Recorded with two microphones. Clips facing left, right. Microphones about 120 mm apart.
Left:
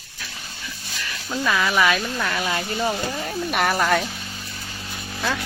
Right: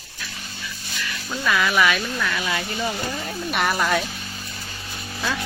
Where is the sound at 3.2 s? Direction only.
45° left (ahead or behind).